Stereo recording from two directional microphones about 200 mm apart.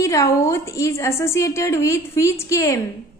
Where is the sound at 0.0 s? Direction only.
15° left (ahead or behind).